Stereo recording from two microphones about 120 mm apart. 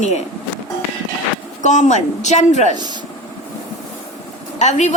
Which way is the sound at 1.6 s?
90° left.